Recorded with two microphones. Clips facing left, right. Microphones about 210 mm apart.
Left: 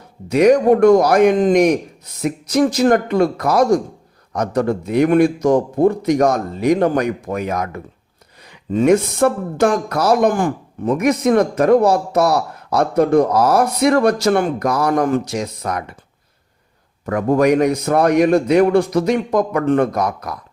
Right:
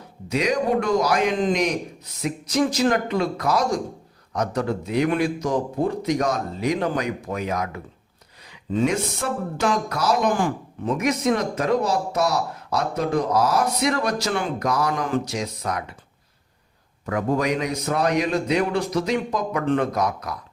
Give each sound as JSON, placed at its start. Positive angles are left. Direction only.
{"t": 0.3, "sound": "a man's voice", "side_deg": 50}
{"t": 17.1, "sound": "a man's voice", "side_deg": 50}